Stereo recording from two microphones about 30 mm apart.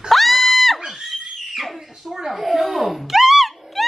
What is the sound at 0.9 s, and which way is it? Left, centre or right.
Screaming, centre.